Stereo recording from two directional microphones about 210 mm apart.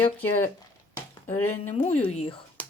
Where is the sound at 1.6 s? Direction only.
35° left (ahead or behind).